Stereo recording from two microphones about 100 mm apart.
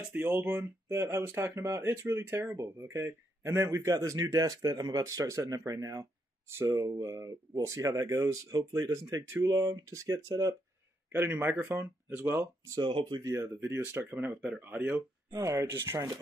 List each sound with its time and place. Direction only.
0.1 s speech: 20° right (ahead or behind)
11.1 s speech: 20° right (ahead or behind)
12.6 s speech: 40° right (ahead or behind); by 15.0 s 15° right (ahead or behind)
15.3 s speech: 30° right (ahead or behind)